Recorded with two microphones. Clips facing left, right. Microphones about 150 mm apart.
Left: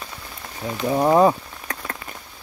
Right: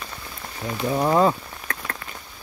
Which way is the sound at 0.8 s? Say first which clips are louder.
Left 3 dB; 15° left (ahead or behind).